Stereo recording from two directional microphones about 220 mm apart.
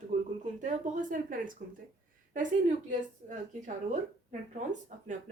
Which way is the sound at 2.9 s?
35° right (ahead or behind).